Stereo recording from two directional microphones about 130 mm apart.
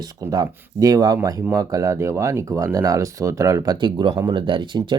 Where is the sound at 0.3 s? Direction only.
25° right (ahead or behind).